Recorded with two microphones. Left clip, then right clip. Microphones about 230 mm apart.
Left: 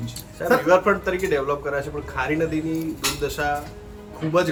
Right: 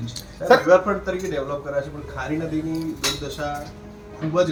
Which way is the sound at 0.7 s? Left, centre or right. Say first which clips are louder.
Right 1 dB; left.